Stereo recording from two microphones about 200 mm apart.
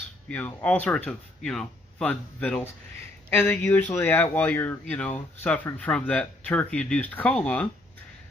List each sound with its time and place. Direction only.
0.3 s speech: 5° left (ahead or behind)